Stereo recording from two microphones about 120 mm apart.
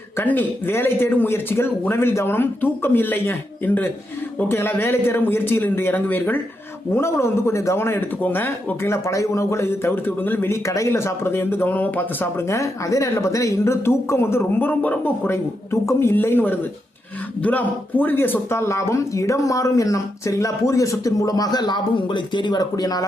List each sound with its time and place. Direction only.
0.2 s speech: 15° left (ahead or behind); by 23.0 s 30° left (ahead or behind)